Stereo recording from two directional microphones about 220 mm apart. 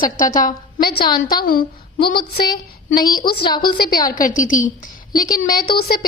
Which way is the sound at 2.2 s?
20° left (ahead or behind).